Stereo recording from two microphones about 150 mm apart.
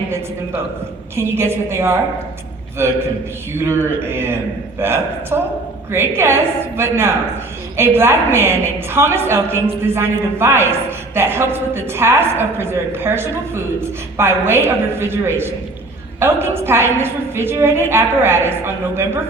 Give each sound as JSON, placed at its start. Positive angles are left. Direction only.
{"t": 1.1, "sound": "a man's voice", "side_deg": -15}